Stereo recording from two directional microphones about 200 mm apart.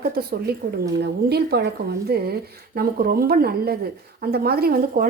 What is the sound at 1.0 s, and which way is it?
Speech, 55° right (ahead or behind).